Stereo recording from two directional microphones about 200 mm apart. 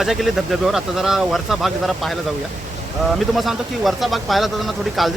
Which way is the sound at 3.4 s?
Centre (ahead or behind).